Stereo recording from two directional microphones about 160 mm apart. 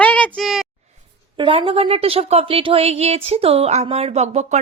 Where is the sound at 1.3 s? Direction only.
30° right (ahead or behind).